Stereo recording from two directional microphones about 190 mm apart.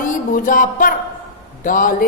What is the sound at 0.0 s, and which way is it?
Music, 45° left (ahead or behind).